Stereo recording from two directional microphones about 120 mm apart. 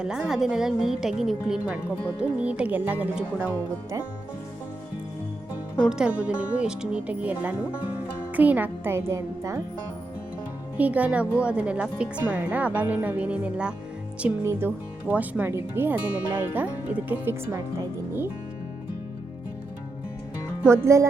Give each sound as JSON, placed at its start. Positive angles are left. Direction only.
{"t": 0.0, "sound": "a woman's voice", "side_deg": -5}
{"t": 5.9, "sound": "speech", "side_deg": -10}
{"t": 10.8, "sound": "speech", "side_deg": -10}
{"t": 20.7, "sound": "speech", "side_deg": -25}